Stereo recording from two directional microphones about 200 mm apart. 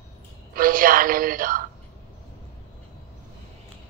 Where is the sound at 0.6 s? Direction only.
45° right (ahead or behind).